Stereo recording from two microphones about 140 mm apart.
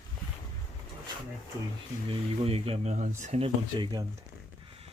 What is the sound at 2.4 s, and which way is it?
Speech, 45° right (ahead or behind).